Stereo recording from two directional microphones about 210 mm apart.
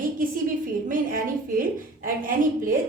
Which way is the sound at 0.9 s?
40° right (ahead or behind).